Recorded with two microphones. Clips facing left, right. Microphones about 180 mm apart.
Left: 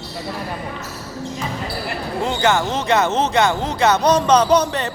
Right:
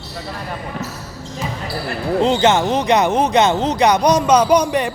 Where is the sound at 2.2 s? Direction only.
20° right (ahead or behind).